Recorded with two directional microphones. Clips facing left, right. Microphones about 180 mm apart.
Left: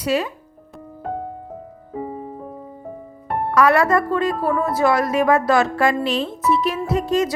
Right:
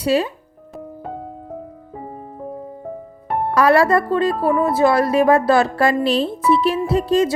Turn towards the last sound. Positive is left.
turn(degrees=-30)  # may be behind; listen again after turning